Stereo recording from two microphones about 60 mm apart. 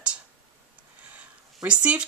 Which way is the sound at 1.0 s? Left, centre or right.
Right.